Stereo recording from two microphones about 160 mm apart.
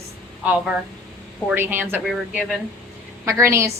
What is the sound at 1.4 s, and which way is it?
A woman's voice, 15° right (ahead or behind).